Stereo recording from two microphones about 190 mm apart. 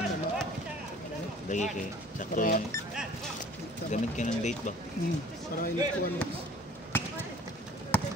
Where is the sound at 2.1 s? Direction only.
45° left (ahead or behind).